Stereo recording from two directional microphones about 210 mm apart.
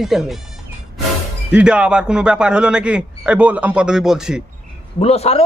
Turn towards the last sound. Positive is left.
turn(degrees=30)  # may be behind; listen again after turning